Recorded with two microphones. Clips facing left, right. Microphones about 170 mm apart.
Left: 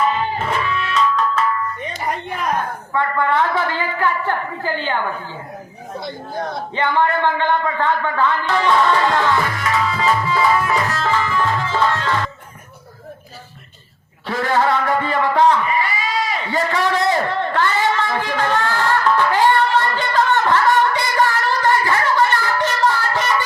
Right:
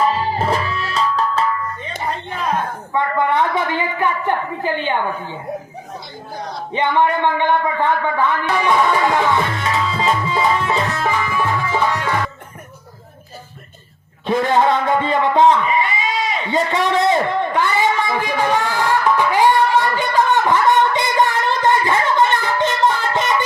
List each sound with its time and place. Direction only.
0.0 s music: 35° right (ahead or behind)
2.0 s a sound: 10° left (ahead or behind)
2.9 s a woman's voice: 20° right (ahead or behind)
6.3 s speech: 55° left (ahead or behind)
6.7 s a man's voice: 20° right (ahead or behind)
14.3 s a sound: 20° right (ahead or behind)